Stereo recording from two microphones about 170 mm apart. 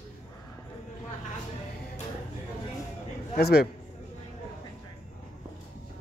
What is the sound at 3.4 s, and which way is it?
Speech, 70° left (ahead or behind).